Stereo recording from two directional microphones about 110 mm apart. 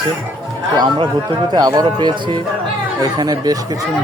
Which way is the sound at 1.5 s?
40° right (ahead or behind).